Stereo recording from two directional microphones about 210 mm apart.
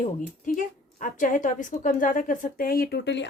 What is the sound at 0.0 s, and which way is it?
A woman's voice, 40° left (ahead or behind).